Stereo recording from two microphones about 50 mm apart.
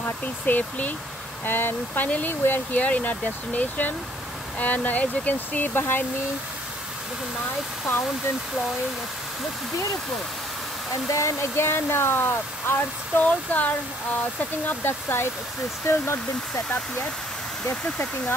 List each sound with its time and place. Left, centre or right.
0.2 s speech: left
1.4 s speech: left
2.0 s speech: left
2.4 s speech: left
2.8 s speech: left
5.8 s speech: left
11.1 s speech: left
11.5 s speech: left
13.2 s speech: left
14.7 s speech: left